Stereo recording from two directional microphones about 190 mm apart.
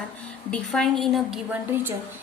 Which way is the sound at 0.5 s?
5° left (ahead or behind).